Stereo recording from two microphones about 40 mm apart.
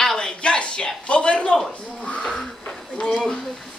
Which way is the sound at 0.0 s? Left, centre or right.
Centre.